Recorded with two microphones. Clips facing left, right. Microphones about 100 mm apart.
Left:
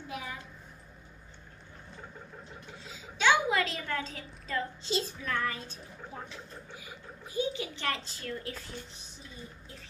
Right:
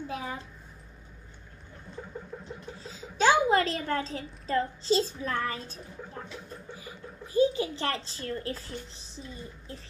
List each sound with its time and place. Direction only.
0.1 s a child's voice: 30° right (ahead or behind)
2.8 s a child's voice: 40° right (ahead or behind)
7.3 s a child's voice: 35° right (ahead or behind)